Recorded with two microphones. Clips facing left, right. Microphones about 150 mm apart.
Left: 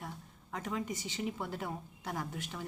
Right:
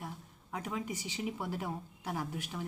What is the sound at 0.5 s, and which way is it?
A woman's voice, 10° right (ahead or behind).